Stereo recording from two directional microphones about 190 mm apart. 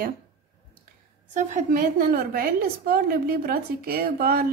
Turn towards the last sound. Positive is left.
turn(degrees=-50)  # may be behind; listen again after turning